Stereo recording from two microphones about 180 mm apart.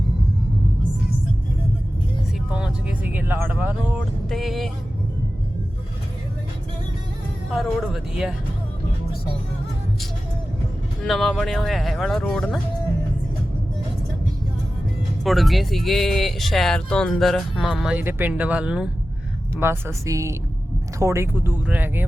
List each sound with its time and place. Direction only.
2.5 s speech: 5° right (ahead or behind)
7.5 s speech: centre (ahead or behind)
11.0 s speech: centre (ahead or behind)
15.2 s speech: centre (ahead or behind)